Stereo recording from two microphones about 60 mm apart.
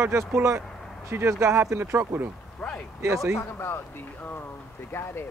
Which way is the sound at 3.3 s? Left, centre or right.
Left.